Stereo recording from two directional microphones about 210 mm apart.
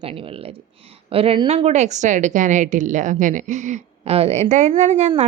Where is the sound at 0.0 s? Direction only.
25° right (ahead or behind).